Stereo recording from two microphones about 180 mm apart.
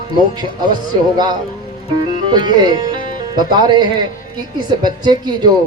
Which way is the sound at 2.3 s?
25° right (ahead or behind).